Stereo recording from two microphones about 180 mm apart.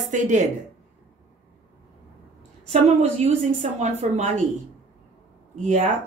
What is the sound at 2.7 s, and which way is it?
A woman's voice, 35° right (ahead or behind).